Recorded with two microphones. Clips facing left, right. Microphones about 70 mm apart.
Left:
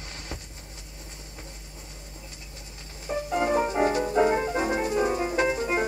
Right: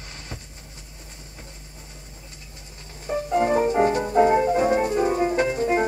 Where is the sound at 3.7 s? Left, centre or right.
Right.